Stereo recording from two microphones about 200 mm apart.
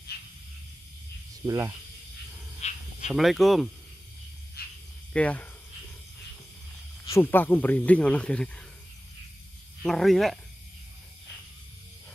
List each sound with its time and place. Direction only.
0.1 s a sound: 55° left (ahead or behind)
1.4 s speech: 15° right (ahead or behind)
2.6 s squeal: 35° left (ahead or behind)
3.1 s speech: centre (ahead or behind)
4.6 s cricket: 50° left (ahead or behind)
5.1 s speech: 5° left (ahead or behind)
7.1 s speech: 10° left (ahead or behind)
9.8 s speech: centre (ahead or behind)